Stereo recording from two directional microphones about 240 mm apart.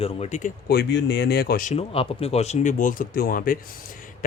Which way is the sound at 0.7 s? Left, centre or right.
Left.